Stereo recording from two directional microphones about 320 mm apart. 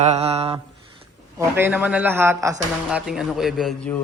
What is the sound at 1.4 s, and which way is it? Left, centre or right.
A man's voice, centre.